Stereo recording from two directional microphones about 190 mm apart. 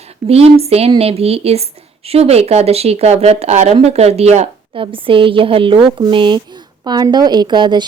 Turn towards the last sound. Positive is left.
turn(degrees=-25)  # may be behind; listen again after turning